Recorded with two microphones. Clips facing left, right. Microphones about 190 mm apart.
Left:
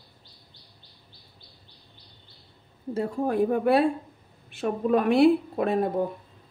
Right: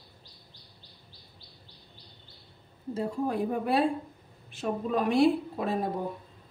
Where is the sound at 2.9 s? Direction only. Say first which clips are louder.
Left 3 dB; 60° left (ahead or behind).